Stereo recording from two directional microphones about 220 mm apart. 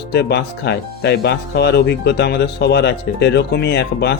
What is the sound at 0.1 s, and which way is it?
Speech, 50° left (ahead or behind).